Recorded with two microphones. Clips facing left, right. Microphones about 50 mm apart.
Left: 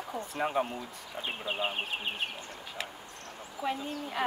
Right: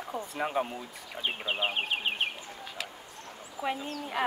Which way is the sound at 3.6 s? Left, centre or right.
Centre.